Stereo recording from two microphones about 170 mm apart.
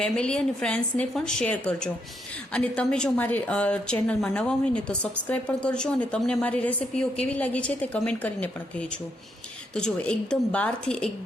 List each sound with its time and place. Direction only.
0.0 s a woman's voice: 5° left (ahead or behind)